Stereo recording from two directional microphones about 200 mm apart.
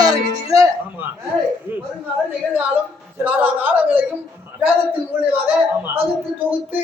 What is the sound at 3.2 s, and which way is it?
Speech, 10° right (ahead or behind).